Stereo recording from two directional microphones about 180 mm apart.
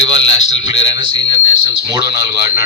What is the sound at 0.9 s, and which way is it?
Speech, 25° right (ahead or behind).